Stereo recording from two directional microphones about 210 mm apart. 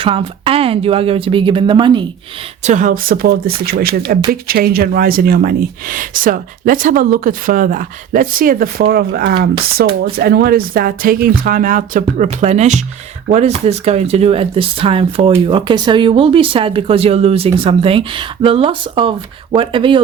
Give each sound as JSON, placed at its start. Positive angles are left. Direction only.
{"t": 0.0, "sound": "speech", "side_deg": -25}
{"t": 2.6, "sound": "speech", "side_deg": -40}